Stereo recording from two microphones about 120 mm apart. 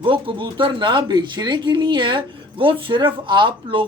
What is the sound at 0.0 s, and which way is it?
Speech, 45° right (ahead or behind).